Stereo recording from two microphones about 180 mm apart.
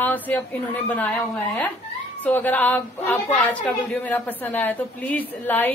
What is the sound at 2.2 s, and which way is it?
A woman's voice, 10° left (ahead or behind).